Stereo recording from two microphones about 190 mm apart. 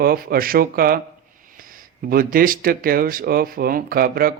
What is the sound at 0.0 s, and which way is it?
Speech, 50° right (ahead or behind).